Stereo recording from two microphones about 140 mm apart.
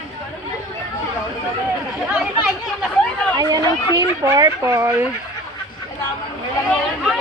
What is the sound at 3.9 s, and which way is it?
Speech, 25° right (ahead or behind).